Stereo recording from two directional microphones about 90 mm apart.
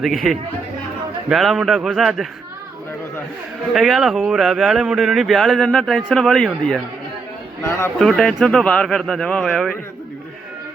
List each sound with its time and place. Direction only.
0.0 s speech: centre (ahead or behind)
3.8 s speech: centre (ahead or behind)
7.9 s speech: 5° left (ahead or behind)